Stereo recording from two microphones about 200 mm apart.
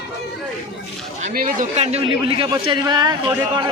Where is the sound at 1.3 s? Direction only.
40° right (ahead or behind); by 3.1 s 20° right (ahead or behind).